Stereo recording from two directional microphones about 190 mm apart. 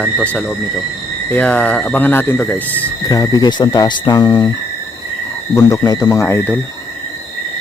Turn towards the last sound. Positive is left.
turn(degrees=10)  # may be behind; listen again after turning